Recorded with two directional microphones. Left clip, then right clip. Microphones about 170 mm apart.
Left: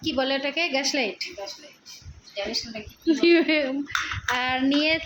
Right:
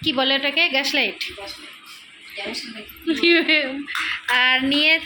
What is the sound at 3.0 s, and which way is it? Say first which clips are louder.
Female singing: right 2 dB; 15° left (ahead or behind).